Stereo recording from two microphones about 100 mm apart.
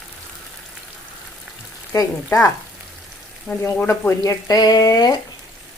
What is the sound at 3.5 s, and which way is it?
Speech, 10° left (ahead or behind).